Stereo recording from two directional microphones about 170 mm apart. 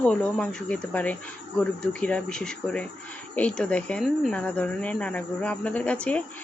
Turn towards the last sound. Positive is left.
turn(degrees=5)  # may be behind; listen again after turning